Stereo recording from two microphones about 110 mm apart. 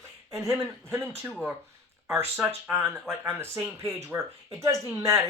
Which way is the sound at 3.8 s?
25° right (ahead or behind).